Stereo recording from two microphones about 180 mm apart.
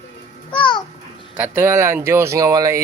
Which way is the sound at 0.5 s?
25° left (ahead or behind).